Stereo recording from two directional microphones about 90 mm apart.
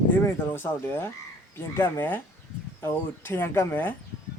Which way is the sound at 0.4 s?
20° left (ahead or behind).